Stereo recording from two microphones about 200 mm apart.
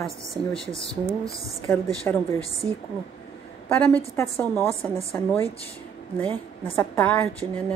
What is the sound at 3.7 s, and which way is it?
A woman's voice, 10° left (ahead or behind).